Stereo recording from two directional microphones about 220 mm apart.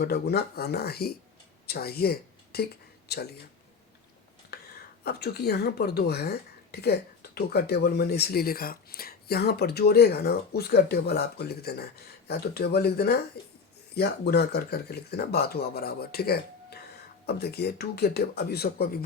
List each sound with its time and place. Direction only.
0.0 s speech: 45° left (ahead or behind)
5.0 s speech: 45° left (ahead or behind)